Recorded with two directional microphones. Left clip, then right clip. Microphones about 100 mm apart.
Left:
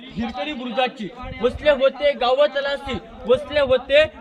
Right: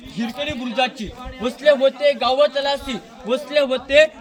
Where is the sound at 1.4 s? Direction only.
25° left (ahead or behind).